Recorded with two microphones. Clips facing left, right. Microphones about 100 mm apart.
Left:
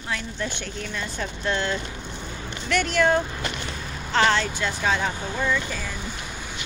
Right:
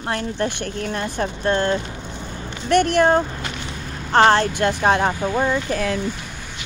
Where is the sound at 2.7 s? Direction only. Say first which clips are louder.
Right 6 dB; 55° right (ahead or behind).